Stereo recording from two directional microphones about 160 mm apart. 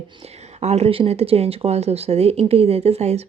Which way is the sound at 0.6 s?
40° right (ahead or behind).